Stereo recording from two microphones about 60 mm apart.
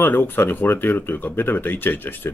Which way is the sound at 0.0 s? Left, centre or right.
Left.